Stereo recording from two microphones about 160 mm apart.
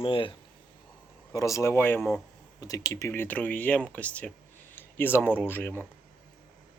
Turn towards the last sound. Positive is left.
turn(degrees=15)  # may be behind; listen again after turning